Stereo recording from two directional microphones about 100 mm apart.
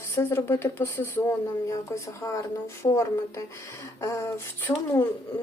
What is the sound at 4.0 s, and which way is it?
Speech, 30° left (ahead or behind).